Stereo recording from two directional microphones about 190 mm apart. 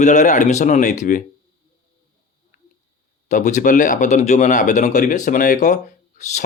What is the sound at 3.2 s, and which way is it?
Speech, 40° left (ahead or behind).